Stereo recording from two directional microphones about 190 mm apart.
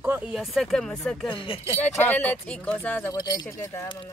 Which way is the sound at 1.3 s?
30° left (ahead or behind).